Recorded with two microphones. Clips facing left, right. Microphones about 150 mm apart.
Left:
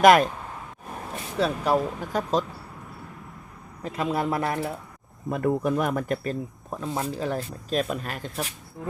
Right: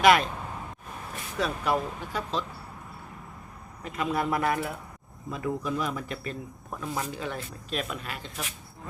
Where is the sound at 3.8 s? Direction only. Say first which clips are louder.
Left 2 dB; 35° left (ahead or behind).